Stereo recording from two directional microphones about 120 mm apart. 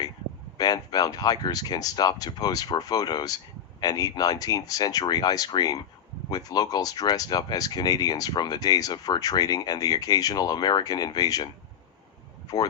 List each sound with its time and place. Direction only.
0.5 s speech: 35° left (ahead or behind)